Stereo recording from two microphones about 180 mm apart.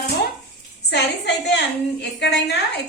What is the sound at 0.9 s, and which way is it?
Speech, 70° left (ahead or behind).